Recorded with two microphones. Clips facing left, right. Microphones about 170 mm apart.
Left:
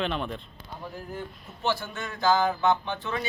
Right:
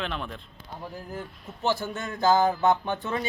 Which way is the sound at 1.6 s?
45° right (ahead or behind).